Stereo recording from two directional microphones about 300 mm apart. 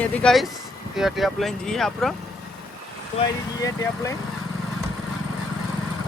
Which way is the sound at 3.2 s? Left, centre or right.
Left.